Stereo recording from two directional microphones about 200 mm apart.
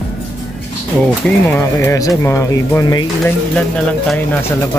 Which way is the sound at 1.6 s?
15° left (ahead or behind).